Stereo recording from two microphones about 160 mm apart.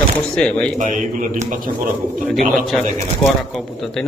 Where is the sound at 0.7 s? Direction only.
55° right (ahead or behind).